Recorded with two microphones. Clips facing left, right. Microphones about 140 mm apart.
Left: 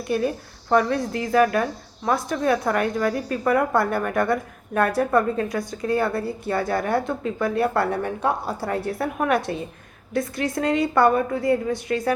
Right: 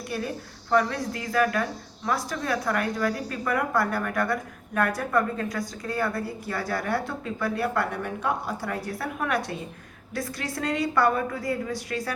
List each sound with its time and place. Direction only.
0.9 s a woman's voice: 25° left (ahead or behind)